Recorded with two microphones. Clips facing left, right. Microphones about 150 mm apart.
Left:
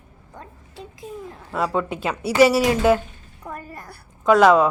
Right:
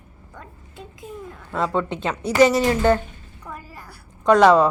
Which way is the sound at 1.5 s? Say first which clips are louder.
Even; 5° left (ahead or behind).